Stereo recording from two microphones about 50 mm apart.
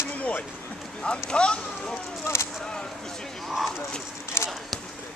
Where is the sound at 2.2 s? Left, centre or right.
Left.